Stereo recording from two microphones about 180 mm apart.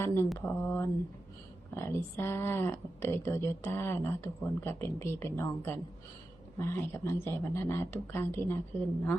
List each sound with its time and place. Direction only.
0.0 s speech: 15° left (ahead or behind)